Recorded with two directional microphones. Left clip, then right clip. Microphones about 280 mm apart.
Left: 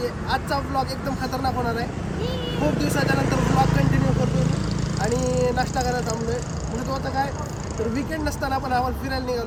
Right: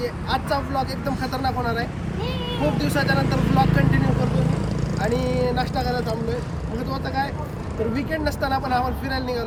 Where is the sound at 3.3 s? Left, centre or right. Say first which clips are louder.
Left 1 dB; left.